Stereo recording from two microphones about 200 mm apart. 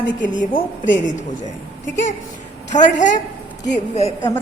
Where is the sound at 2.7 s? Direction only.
40° left (ahead or behind).